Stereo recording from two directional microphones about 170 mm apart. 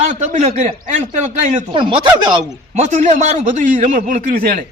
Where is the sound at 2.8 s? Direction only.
45° right (ahead or behind).